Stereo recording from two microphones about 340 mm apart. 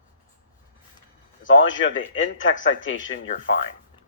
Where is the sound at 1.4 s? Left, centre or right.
Left.